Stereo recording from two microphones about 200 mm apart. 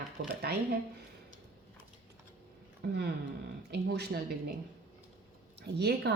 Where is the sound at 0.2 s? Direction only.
55° right (ahead or behind).